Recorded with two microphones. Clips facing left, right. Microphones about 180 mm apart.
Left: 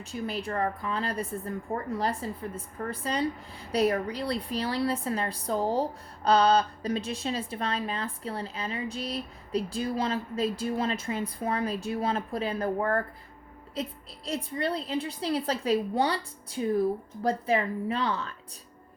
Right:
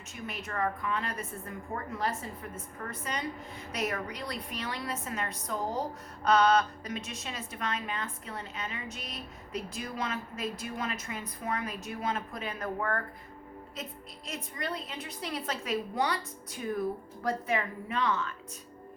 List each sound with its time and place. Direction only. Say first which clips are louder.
0.1 s a woman's voice: left 7 dB; 30° left (ahead or behind)